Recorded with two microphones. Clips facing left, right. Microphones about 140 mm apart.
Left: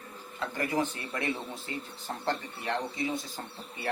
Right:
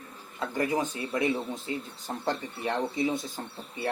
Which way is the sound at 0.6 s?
20° right (ahead or behind).